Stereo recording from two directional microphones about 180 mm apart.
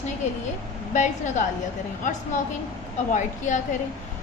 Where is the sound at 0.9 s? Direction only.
40° left (ahead or behind).